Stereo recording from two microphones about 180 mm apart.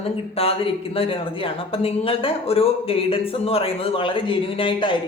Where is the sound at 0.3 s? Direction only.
30° left (ahead or behind).